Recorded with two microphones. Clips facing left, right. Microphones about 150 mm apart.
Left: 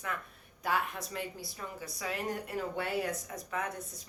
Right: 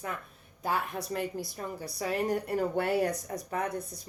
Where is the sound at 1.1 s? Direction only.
45° right (ahead or behind).